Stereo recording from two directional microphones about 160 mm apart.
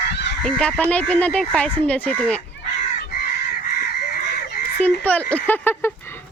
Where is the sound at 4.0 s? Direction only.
80° left.